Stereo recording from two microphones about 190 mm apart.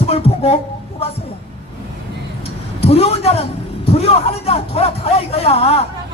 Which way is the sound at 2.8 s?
30° left (ahead or behind).